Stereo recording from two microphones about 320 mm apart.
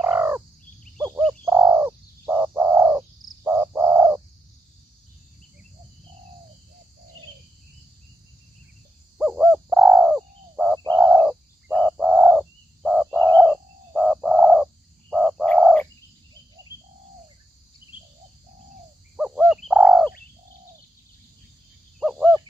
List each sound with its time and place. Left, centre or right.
0.0 s bird: centre
0.9 s frog: centre
1.4 s bird: centre
9.2 s bird: centre
19.1 s bird: centre
22.0 s a sound: centre